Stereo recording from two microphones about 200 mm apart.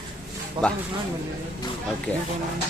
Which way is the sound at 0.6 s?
25° right (ahead or behind).